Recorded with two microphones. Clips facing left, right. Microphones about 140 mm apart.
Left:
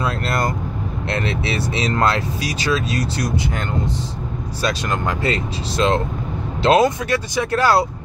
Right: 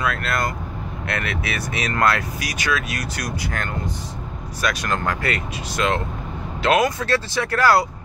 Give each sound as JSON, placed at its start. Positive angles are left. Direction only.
{"t": 0.0, "sound": "speech", "side_deg": 30}
{"t": 7.1, "sound": "speech", "side_deg": 20}